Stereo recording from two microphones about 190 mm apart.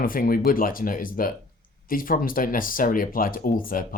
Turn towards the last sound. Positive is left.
turn(degrees=45)  # may be behind; listen again after turning